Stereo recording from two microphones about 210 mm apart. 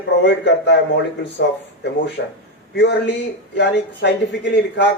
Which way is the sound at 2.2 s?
55° left (ahead or behind).